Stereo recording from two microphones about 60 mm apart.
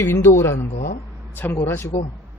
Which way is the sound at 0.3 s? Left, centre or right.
Left.